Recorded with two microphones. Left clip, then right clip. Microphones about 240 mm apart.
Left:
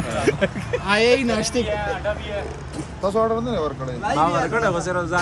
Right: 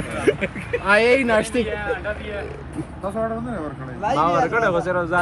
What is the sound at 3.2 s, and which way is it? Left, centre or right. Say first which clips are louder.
Speech: left 5 dB; left.